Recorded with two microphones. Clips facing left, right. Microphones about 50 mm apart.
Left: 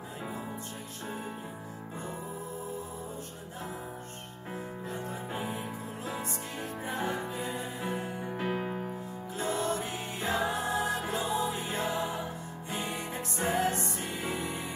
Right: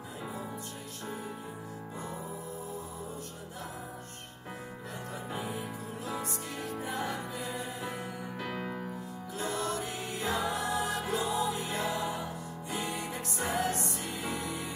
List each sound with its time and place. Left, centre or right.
5.3 s music: left